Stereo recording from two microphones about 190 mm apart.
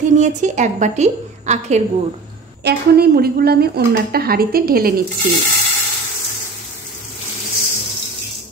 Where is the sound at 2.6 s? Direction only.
55° right (ahead or behind).